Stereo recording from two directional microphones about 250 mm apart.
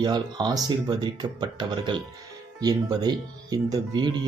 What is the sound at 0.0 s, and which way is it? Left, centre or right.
Speech, centre.